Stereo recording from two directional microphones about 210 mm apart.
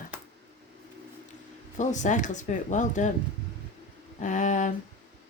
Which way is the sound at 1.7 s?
35° left (ahead or behind).